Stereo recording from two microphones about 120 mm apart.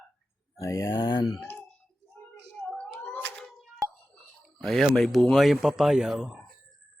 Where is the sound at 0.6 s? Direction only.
25° left (ahead or behind).